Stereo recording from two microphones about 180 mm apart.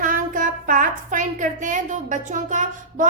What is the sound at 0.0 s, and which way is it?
A woman's voice, 45° right (ahead or behind).